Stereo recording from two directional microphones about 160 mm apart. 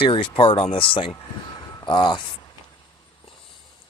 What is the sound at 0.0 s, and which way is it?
Speech, 35° left (ahead or behind).